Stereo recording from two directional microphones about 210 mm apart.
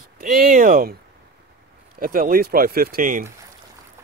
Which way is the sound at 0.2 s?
40° right (ahead or behind).